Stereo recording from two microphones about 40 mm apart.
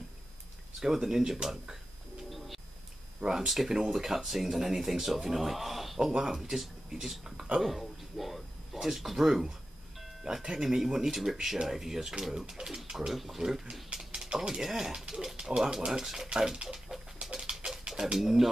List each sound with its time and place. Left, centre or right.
0.7 s speech: centre
2.2 s train: centre
3.2 s speech: centre
3.4 s speech: centre
10.2 s speech: right; by 13.4 s centre
13.4 s speech: centre
17.4 s bird: right
18.2 s speech: centre